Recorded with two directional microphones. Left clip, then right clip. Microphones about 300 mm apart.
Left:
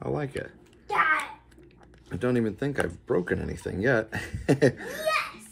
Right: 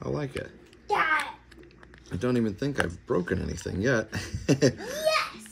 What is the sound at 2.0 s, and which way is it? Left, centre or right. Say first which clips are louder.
Speech: left 1 dB; centre.